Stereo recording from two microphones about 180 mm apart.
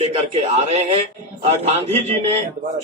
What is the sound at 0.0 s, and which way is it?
A man's voice, 35° right (ahead or behind).